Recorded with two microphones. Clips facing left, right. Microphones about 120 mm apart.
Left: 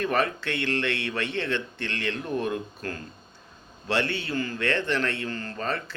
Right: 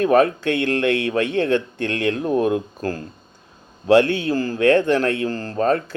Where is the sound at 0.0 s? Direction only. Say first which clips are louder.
Right 10 dB; 45° right (ahead or behind).